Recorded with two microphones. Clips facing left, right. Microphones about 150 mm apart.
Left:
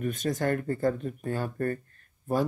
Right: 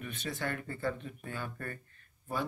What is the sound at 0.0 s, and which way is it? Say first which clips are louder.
Speech: left 10 dB; 45° left (ahead or behind).